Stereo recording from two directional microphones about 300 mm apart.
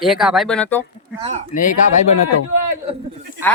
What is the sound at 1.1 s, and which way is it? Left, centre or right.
Speech, centre.